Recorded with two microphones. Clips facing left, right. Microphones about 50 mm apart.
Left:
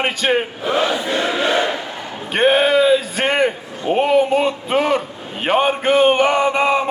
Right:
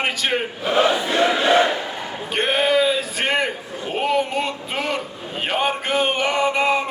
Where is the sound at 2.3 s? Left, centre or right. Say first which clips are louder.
Left 7 dB; left.